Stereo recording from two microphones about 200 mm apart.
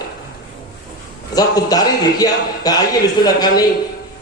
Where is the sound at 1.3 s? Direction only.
20° left (ahead or behind).